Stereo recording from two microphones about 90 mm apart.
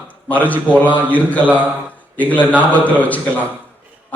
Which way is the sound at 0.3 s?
15° left (ahead or behind).